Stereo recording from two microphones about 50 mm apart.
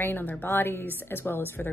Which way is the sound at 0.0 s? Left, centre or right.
Left.